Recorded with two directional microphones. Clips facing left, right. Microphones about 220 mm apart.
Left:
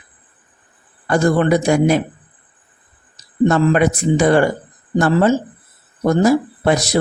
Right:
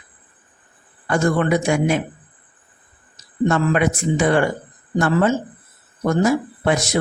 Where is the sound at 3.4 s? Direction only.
35° left (ahead or behind).